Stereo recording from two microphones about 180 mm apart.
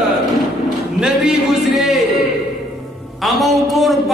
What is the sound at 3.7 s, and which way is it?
Speech, centre (ahead or behind).